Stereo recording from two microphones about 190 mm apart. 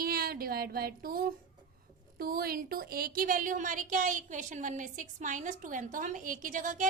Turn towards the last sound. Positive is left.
turn(degrees=-45)  # may be behind; listen again after turning